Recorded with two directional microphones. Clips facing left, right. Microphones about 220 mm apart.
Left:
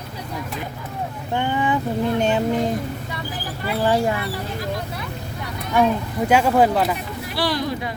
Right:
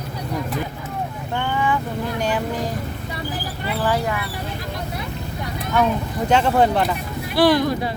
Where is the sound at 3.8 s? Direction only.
25° left (ahead or behind).